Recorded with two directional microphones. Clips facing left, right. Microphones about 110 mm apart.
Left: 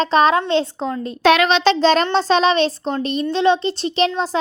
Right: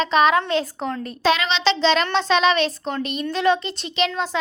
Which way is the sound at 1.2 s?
55° left (ahead or behind).